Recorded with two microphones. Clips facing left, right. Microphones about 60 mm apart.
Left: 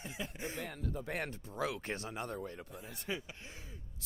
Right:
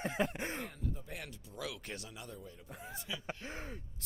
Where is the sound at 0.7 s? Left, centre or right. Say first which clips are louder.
Left 4 dB; left.